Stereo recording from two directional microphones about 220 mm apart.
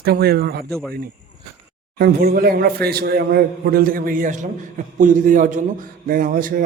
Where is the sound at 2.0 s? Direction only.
45° right (ahead or behind).